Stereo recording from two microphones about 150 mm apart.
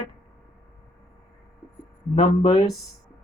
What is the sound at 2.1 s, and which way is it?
Speech, 40° left (ahead or behind).